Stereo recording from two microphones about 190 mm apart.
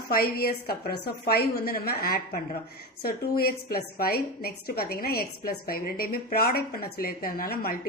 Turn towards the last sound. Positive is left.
turn(degrees=50)  # may be behind; listen again after turning